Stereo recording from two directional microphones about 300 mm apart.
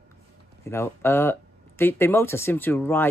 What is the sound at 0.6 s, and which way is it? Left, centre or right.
Speech, centre.